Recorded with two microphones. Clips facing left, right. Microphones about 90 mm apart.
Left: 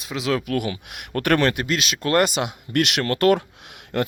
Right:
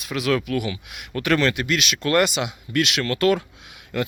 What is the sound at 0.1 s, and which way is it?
Speech, 25° left (ahead or behind).